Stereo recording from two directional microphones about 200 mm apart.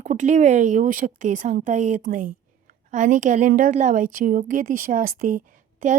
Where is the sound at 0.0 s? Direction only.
40° right (ahead or behind).